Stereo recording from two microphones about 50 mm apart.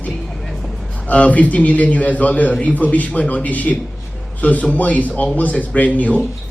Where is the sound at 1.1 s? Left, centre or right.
Left.